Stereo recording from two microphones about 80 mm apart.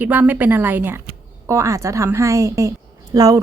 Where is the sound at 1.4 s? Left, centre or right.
Right.